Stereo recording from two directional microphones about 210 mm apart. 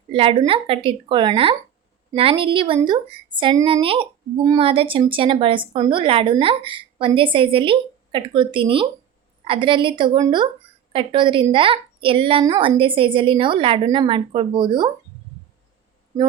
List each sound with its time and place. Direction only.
0.1 s speech: 25° right (ahead or behind)
16.1 s speech: 15° right (ahead or behind)